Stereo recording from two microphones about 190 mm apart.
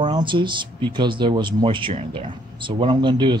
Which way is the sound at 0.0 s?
25° right (ahead or behind).